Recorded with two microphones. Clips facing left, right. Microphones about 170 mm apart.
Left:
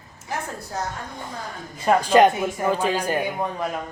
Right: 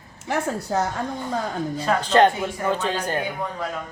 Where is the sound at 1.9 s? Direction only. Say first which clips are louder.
Left 2 dB; 10° left (ahead or behind).